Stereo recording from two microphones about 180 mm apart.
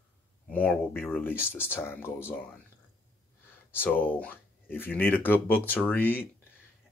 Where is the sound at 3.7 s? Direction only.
10° left (ahead or behind).